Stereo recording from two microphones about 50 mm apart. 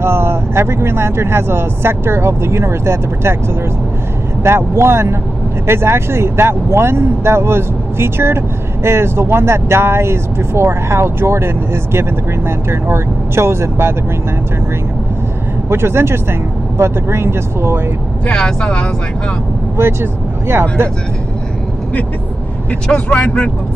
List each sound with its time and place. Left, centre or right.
0.0 s speech: right
4.4 s speech: right
15.7 s speech: right
18.2 s speech: centre
19.8 s speech: right
22.8 s speech: left